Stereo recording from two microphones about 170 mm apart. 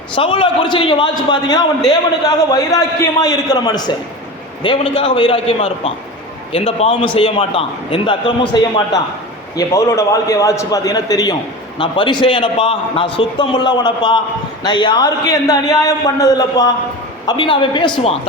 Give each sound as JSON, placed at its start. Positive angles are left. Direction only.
{"t": 0.2, "sound": "a man's voice", "side_deg": 30}